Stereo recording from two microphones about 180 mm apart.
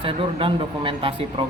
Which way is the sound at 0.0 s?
30° right (ahead or behind).